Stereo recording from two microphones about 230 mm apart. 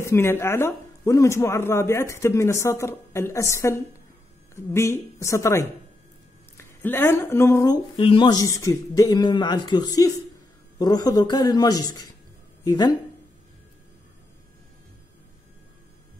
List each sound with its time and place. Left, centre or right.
0.0 s speech: centre